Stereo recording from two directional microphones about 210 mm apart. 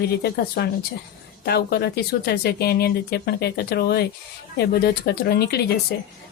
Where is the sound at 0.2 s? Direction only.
50° left (ahead or behind).